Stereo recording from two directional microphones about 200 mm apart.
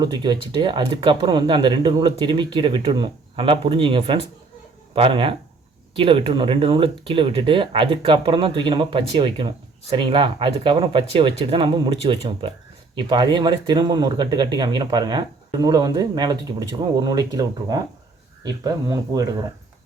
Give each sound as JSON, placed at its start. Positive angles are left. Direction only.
{"t": 0.0, "sound": "speech", "side_deg": -20}